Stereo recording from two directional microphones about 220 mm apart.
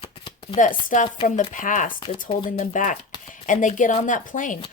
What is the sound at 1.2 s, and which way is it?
A woman's voice, 35° left (ahead or behind).